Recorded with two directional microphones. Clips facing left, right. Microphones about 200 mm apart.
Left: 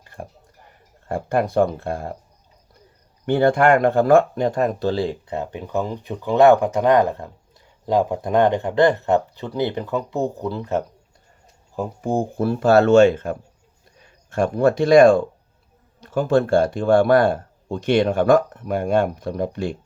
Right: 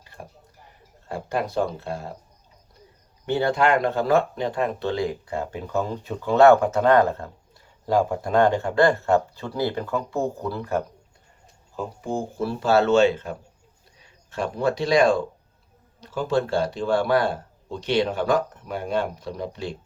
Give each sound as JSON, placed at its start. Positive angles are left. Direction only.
{"t": 0.0, "sound": "tick-tock", "side_deg": 50}
{"t": 1.0, "sound": "speech", "side_deg": 50}
{"t": 3.2, "sound": "speech", "side_deg": 50}
{"t": 12.0, "sound": "speech", "side_deg": 50}